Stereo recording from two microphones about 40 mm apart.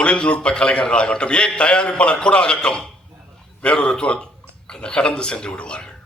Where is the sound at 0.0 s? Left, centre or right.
Left.